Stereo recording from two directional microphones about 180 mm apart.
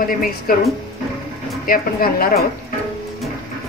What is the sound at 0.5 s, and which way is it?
Speech, 55° left (ahead or behind).